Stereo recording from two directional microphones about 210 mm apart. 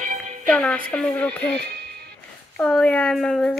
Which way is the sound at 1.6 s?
55° right (ahead or behind).